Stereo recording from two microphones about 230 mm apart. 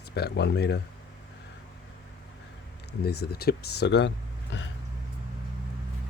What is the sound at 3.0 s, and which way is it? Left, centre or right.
Speech, left.